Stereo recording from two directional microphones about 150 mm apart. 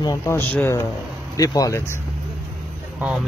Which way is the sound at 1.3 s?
25° left (ahead or behind).